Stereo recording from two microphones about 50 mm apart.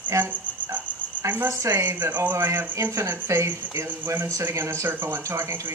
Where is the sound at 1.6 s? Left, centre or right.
Right.